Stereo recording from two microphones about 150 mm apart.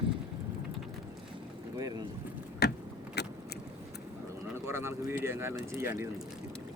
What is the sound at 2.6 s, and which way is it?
Vehicle, 90° left.